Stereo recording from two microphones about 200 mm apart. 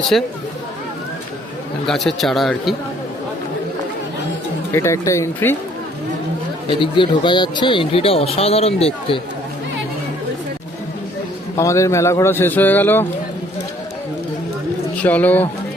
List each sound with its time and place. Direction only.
0.1 s a man's voice: 5° left (ahead or behind)
1.9 s a man's voice: centre (ahead or behind)
4.7 s a man's voice: 15° left (ahead or behind)
6.7 s speech: 25° left (ahead or behind)
11.5 s a man's voice: 15° left (ahead or behind)
15.0 s a man's voice: 10° left (ahead or behind)